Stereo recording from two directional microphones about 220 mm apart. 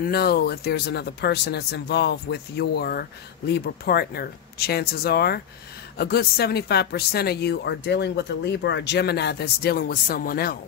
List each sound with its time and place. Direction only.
0.0 s speech: 45° left (ahead or behind)